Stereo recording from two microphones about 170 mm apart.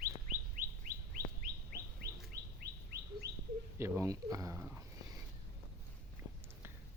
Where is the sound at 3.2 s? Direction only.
70° right (ahead or behind).